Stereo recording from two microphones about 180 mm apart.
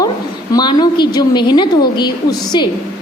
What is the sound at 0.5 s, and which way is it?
A woman's voice, 25° left (ahead or behind).